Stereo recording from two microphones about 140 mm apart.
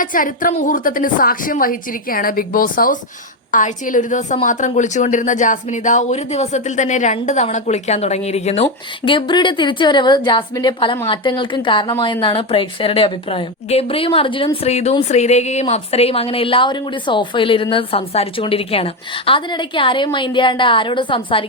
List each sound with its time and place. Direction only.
0.0 s a woman's voice: 75° left (ahead or behind)
3.5 s a woman's voice: 70° left (ahead or behind); by 21.4 s 35° left (ahead or behind)